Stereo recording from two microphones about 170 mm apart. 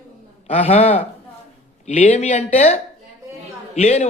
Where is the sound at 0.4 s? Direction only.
40° left (ahead or behind).